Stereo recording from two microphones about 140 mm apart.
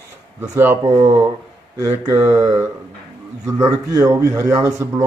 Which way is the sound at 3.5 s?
25° right (ahead or behind).